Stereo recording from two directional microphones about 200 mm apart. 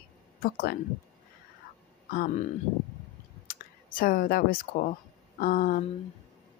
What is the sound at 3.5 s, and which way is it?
Speech, 45° left (ahead or behind).